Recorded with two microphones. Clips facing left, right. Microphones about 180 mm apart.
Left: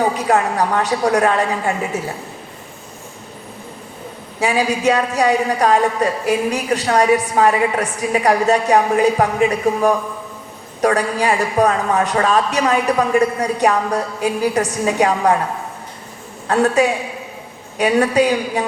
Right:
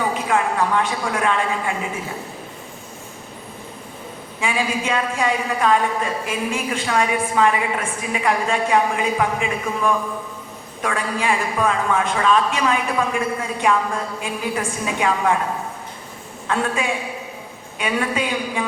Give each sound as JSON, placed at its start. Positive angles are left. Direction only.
{"t": 0.0, "sound": "a woman's voice", "side_deg": 40}
{"t": 4.4, "sound": "a woman's voice", "side_deg": 40}
{"t": 16.5, "sound": "a woman's voice", "side_deg": 40}